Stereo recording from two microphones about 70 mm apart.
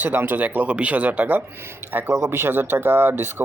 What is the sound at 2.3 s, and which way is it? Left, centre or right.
Speech, right.